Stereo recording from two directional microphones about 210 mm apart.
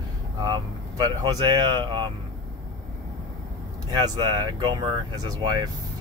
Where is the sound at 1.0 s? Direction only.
20° right (ahead or behind).